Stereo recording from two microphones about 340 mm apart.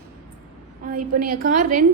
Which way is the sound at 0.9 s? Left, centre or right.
Right.